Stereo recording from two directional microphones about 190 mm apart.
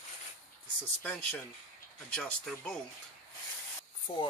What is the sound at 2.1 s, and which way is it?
Speech, 5° left (ahead or behind).